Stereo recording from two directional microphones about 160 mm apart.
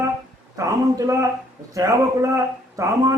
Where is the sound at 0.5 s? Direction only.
20° right (ahead or behind).